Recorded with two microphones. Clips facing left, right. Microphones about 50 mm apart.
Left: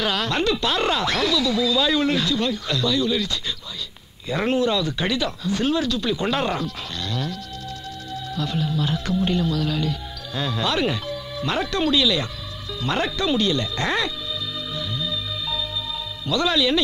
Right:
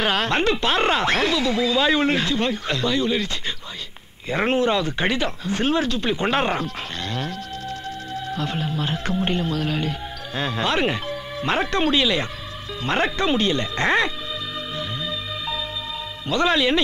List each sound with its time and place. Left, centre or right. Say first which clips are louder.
0.0 s speech: right 2 dB; right
14.8 s music: left 2 dB; right
16.3 s speech: right 1 dB; right